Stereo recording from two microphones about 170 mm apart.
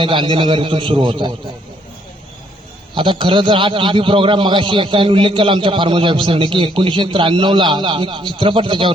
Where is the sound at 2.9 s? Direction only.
30° right (ahead or behind).